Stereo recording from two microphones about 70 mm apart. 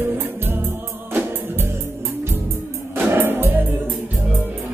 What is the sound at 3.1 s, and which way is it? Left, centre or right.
Music, right.